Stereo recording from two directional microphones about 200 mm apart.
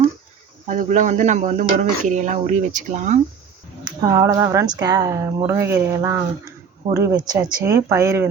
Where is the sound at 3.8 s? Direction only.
15° right (ahead or behind).